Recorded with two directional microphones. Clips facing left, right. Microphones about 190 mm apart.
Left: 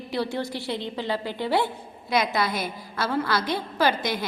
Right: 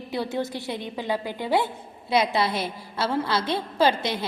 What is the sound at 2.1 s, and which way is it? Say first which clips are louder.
A woman's voice: right 2 dB; 30° right (ahead or behind).